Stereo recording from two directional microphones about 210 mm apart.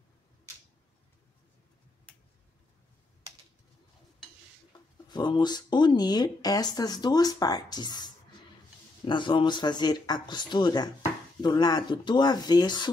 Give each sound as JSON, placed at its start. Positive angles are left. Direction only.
{"t": 5.0, "sound": "speech", "side_deg": 20}